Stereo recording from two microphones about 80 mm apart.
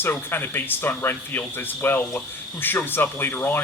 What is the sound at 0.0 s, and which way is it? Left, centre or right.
Speech, left.